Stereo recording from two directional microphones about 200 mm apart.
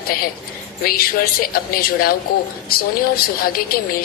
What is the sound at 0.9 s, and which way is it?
A woman's voice, 45° left (ahead or behind).